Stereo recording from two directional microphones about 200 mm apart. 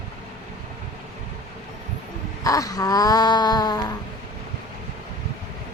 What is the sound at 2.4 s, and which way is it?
A woman's voice, 15° left (ahead or behind).